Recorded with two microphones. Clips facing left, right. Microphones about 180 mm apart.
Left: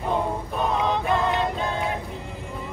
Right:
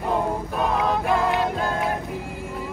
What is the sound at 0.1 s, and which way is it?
Music, 5° right (ahead or behind).